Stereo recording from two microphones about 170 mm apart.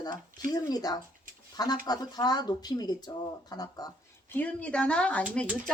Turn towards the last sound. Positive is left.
turn(degrees=5)  # may be behind; listen again after turning